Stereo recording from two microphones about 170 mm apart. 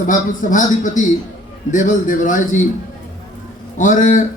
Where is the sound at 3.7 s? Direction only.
50° left (ahead or behind).